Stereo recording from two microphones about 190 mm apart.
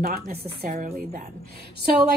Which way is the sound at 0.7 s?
45° right (ahead or behind).